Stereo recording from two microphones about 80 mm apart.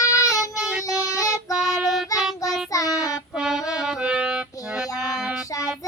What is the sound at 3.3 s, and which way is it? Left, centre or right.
Music, centre.